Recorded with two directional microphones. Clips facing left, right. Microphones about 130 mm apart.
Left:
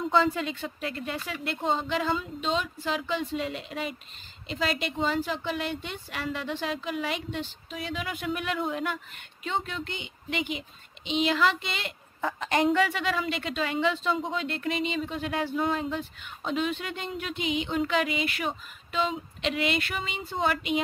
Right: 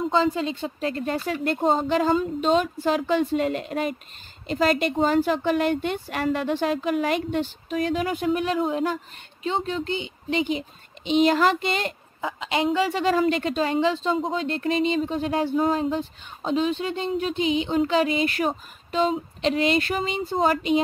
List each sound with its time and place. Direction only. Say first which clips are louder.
0.1 s a woman's voice: even; 25° right (ahead or behind)
11.1 s a woman's voice: right 6 dB; 45° right (ahead or behind)
12.2 s a woman's voice: right 1 dB; 10° right (ahead or behind)
12.8 s speech: right 7 dB; 40° right (ahead or behind)